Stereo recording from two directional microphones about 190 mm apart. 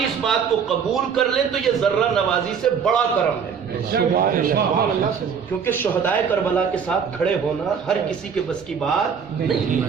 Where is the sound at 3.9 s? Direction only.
50° right (ahead or behind).